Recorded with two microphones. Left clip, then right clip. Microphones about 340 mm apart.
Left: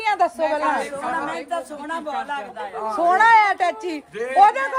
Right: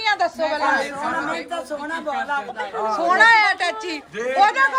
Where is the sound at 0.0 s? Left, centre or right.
Left.